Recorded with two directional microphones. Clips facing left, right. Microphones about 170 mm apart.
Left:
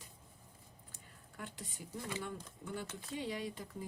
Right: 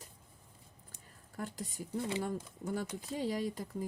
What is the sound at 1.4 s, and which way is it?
Speech, 40° right (ahead or behind).